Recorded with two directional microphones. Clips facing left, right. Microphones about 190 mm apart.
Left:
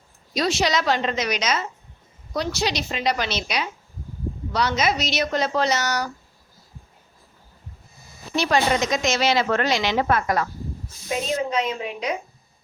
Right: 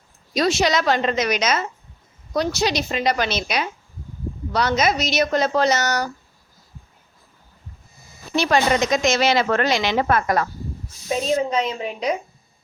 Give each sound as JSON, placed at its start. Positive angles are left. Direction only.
{"t": 0.3, "sound": "a woman's voice", "side_deg": -50}
{"t": 8.4, "sound": "a woman's voice", "side_deg": -55}
{"t": 11.5, "sound": "a woman's voice", "side_deg": -35}